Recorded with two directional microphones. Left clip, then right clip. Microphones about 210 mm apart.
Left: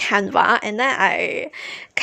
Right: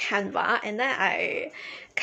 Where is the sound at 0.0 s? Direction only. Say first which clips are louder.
Left 9 dB; 45° left (ahead or behind).